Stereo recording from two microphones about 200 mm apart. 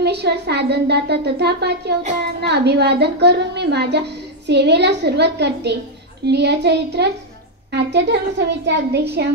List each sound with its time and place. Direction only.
0.0 s speech: 55° right (ahead or behind)